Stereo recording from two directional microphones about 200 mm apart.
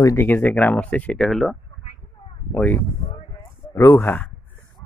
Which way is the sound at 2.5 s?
10° left (ahead or behind).